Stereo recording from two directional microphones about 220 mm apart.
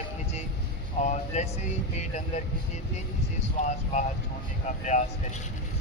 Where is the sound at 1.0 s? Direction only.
30° left (ahead or behind).